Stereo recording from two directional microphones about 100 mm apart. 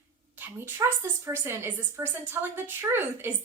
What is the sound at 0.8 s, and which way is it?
A woman's voice, 25° right (ahead or behind).